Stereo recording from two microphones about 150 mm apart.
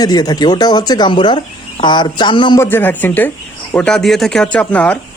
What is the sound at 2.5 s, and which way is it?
Speech, 15° left (ahead or behind).